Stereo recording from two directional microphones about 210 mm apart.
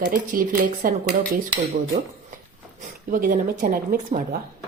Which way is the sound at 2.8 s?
40° right (ahead or behind).